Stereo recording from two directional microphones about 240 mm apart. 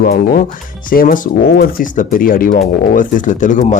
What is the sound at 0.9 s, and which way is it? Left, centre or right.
Speech, left.